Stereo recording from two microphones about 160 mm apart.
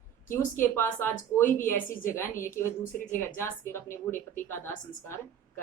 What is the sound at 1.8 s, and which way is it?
Speech, 55° left (ahead or behind).